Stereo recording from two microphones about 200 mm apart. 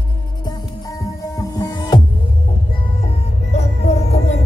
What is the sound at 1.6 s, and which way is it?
Music, 20° left (ahead or behind).